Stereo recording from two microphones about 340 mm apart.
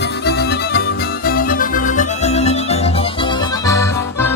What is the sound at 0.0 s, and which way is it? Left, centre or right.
Music, left.